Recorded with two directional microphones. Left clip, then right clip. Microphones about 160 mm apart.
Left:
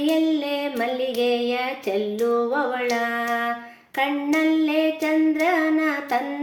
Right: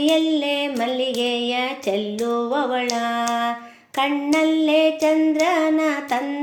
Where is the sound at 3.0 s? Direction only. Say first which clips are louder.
Right 2 dB; 30° right (ahead or behind).